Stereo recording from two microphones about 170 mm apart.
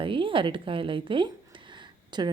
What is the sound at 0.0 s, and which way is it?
A woman's voice, 30° right (ahead or behind).